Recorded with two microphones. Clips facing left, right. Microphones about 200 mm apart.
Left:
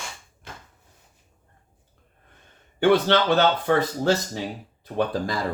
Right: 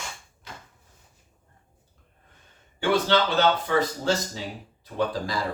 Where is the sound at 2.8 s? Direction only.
55° left (ahead or behind).